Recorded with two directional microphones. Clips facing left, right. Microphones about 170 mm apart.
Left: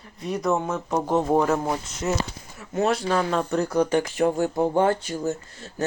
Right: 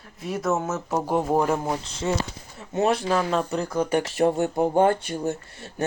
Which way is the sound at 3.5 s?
Centre (ahead or behind).